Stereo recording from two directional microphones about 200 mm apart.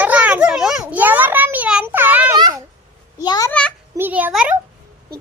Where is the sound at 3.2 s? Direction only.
20° left (ahead or behind).